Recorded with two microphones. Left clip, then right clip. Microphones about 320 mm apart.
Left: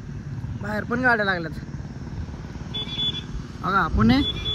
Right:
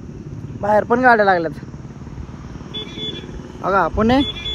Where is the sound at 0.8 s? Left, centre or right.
Right.